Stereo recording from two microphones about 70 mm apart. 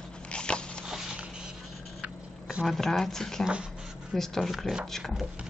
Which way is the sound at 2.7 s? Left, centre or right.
Centre.